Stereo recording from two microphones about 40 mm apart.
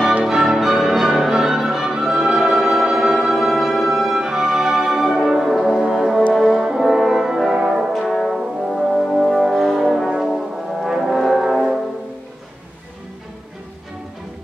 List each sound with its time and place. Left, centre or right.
0.2 s music: centre
6.3 s brass instrument: centre
7.5 s brass instrument: centre
7.9 s brass instrument: centre